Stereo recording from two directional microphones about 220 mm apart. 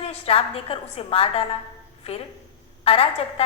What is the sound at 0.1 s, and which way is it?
A woman's voice, 25° left (ahead or behind).